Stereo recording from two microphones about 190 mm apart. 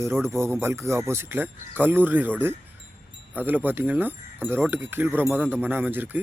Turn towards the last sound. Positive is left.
turn(degrees=-10)  # may be behind; listen again after turning